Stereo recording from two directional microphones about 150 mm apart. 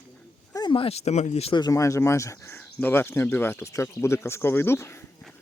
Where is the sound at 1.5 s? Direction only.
25° left (ahead or behind).